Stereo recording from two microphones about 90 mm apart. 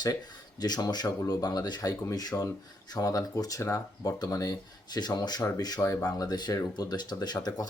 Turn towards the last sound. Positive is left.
turn(degrees=50)  # may be behind; listen again after turning